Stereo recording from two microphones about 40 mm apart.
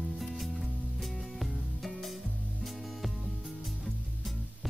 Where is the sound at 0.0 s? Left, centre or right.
Centre.